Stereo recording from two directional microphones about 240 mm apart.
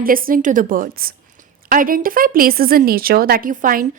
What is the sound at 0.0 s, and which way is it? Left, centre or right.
A woman's voice, right.